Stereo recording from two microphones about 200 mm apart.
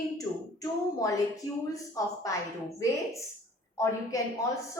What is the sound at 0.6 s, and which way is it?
Speech, 15° left (ahead or behind).